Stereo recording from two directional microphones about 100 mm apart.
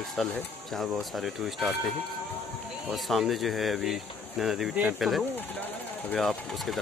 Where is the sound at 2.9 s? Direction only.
Centre (ahead or behind).